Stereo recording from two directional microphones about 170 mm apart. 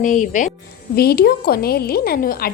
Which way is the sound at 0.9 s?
65° left (ahead or behind).